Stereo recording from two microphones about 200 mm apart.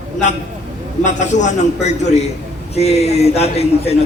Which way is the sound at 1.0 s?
35° left (ahead or behind).